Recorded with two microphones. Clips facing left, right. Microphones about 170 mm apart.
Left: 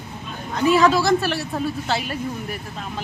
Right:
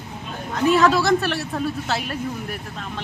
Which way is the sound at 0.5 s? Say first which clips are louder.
Even; centre (ahead or behind).